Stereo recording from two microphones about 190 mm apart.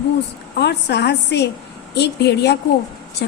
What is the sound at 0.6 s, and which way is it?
A woman's voice, 65° left (ahead or behind).